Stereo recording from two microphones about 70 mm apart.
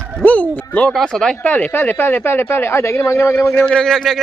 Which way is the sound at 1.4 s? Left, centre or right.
Left.